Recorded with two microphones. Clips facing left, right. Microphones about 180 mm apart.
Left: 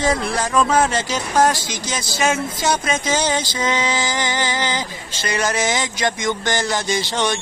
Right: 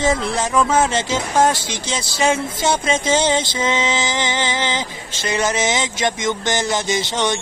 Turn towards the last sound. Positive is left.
turn(degrees=-20)  # may be behind; listen again after turning